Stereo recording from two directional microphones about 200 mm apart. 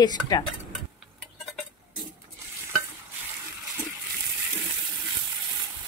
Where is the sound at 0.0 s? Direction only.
20° left (ahead or behind).